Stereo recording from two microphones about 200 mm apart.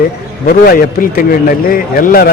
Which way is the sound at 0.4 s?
45° left (ahead or behind).